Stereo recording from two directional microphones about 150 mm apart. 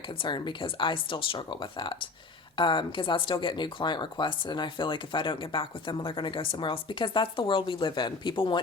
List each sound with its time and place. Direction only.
0.2 s speech: 30° left (ahead or behind)